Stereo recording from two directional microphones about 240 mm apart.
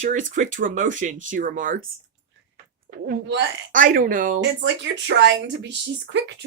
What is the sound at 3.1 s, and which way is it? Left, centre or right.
Speech, right.